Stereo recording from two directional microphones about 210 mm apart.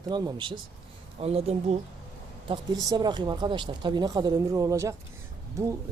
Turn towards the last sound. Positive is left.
turn(degrees=-15)  # may be behind; listen again after turning